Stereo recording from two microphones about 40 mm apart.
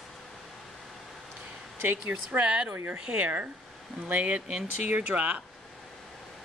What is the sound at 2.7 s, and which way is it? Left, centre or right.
Speech, right.